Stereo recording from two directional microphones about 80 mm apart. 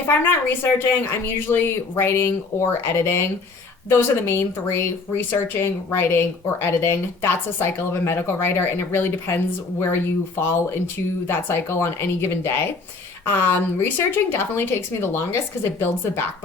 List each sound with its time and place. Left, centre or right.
0.1 s speech: left